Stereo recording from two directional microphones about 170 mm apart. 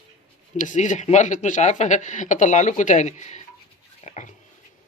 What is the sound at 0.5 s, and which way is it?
Speech, 45° left (ahead or behind).